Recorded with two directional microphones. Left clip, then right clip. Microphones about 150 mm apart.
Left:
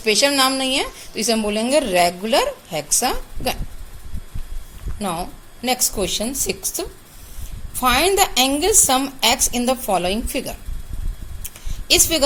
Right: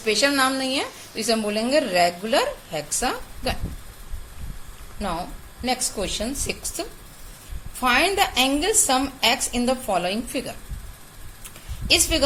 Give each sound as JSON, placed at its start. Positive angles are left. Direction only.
{"t": 0.0, "sound": "a woman's voice", "side_deg": 50}
{"t": 4.9, "sound": "a woman's voice", "side_deg": 55}
{"t": 7.8, "sound": "a woman's voice", "side_deg": 45}
{"t": 11.9, "sound": "a woman's voice", "side_deg": 50}